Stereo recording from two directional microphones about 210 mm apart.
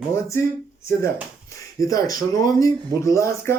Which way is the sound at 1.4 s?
15° left (ahead or behind).